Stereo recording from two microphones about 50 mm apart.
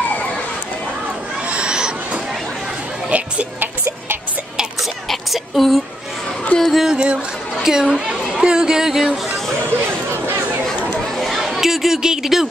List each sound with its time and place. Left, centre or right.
1.5 s owl: centre
3.5 s music: right
5.1 s a sound: centre
6.9 s chatter: centre
11.1 s chatter: centre